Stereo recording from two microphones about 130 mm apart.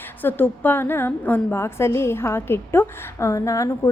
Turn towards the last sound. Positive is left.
turn(degrees=25)  # may be behind; listen again after turning